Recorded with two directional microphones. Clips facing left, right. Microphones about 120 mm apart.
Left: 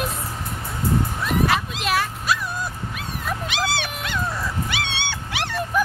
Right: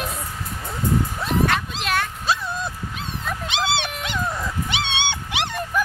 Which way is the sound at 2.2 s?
25° right (ahead or behind).